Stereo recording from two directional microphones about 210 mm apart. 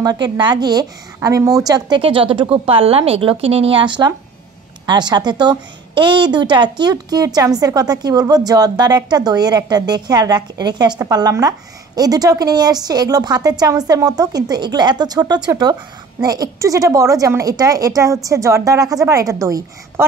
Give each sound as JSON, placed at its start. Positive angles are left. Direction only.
{"t": 0.0, "sound": "a woman's voice", "side_deg": -20}